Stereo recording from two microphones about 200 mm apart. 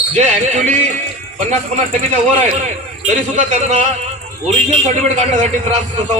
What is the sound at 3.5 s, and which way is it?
A man's voice, 35° right (ahead or behind).